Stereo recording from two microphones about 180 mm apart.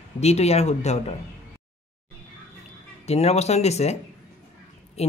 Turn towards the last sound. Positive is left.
turn(degrees=35)  # may be behind; listen again after turning